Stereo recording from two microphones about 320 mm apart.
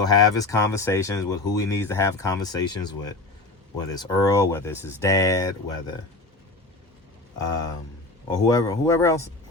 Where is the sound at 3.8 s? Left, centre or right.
Centre.